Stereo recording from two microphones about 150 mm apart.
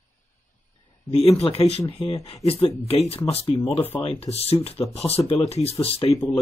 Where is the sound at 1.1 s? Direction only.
40° left (ahead or behind).